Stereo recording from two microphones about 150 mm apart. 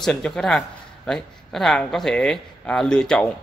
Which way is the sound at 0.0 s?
5° left (ahead or behind).